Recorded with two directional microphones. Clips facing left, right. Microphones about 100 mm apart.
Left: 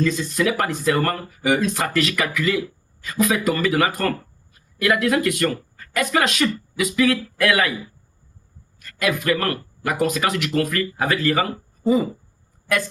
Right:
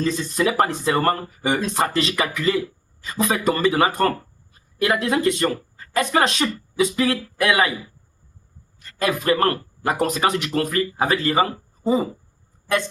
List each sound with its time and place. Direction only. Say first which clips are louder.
0.0 s speech: left 1 dB; 35° right (ahead or behind)
8.8 s speech: even; 30° right (ahead or behind)